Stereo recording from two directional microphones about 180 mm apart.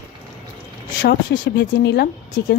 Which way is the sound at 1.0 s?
70° left (ahead or behind).